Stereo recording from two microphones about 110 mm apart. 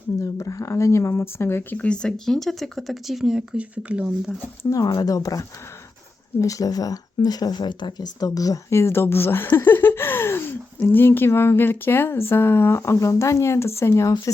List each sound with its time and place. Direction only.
0.2 s speech: 30° left (ahead or behind); by 4.4 s 10° right (ahead or behind)
4.7 s speech: 35° left (ahead or behind)